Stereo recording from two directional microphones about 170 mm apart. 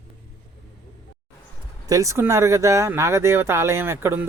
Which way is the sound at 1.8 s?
20° right (ahead or behind).